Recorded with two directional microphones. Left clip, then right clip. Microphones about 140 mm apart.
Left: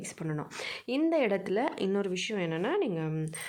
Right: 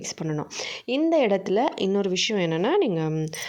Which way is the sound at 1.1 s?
25° right (ahead or behind).